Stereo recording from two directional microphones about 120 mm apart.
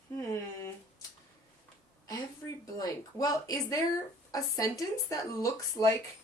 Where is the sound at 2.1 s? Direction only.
30° left (ahead or behind).